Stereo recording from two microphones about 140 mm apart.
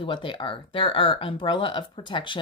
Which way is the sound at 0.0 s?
35° left (ahead or behind).